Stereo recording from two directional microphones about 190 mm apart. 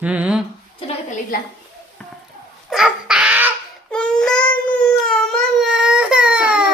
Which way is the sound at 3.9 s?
5° left (ahead or behind).